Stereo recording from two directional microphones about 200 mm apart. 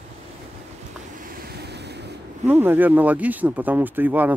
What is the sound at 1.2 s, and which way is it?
Waves, 45° right (ahead or behind).